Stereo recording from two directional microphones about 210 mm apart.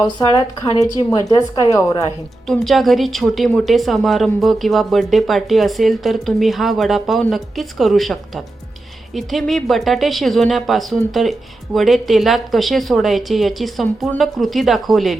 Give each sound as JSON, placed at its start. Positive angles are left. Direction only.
{"t": 0.0, "sound": "speech", "side_deg": 20}
{"t": 2.5, "sound": "speech", "side_deg": 0}